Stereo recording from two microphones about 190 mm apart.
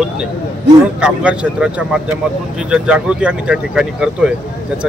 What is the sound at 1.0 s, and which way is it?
Speech, 5° right (ahead or behind).